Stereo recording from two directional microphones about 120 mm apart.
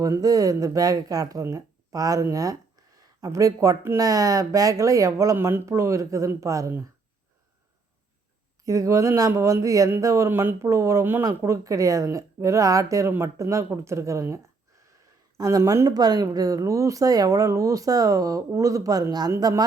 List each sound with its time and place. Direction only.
0.0 s speech: 30° right (ahead or behind)
8.6 s speech: 25° right (ahead or behind)
15.4 s speech: 30° right (ahead or behind)